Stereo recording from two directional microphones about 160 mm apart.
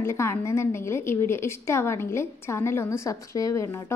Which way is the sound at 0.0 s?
15° left (ahead or behind).